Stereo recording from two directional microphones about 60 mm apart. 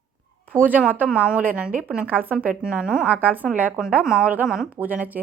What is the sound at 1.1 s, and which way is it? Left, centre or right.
Speech, centre.